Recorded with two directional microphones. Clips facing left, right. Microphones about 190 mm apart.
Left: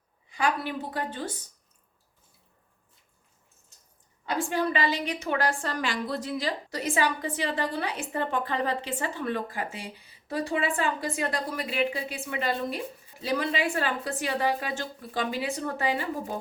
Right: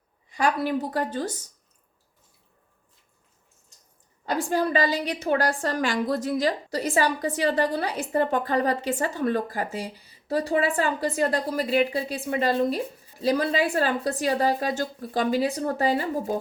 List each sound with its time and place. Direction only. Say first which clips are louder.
0.3 s a woman's voice: right 4 dB; 40° right (ahead or behind)
4.3 s a woman's voice: right 3 dB; 40° right (ahead or behind)